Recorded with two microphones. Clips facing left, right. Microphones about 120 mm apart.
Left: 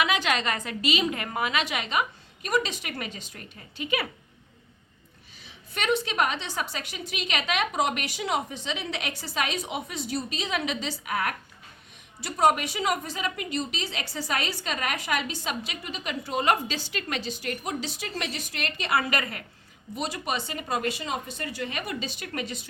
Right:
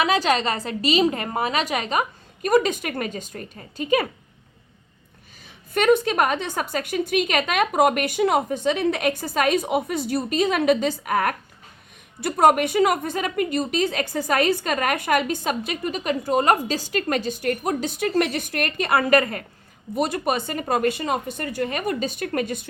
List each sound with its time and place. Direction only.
0.0 s a woman's voice: 35° right (ahead or behind)
5.4 s a woman's voice: 45° right (ahead or behind)